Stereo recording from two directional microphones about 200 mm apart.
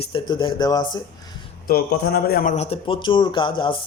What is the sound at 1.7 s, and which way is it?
Speech, 50° left (ahead or behind).